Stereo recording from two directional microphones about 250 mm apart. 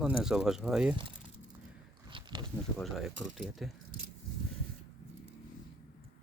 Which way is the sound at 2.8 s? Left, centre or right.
Centre.